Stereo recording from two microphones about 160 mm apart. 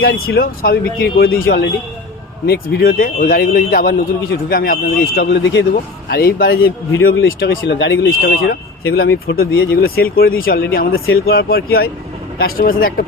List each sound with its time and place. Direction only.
0.0 s speech: 75° left (ahead or behind)
1.0 s speech: 75° left (ahead or behind)
6.1 s speech: 75° left (ahead or behind)